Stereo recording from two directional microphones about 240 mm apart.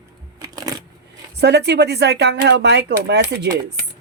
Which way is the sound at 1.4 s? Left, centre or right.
Right.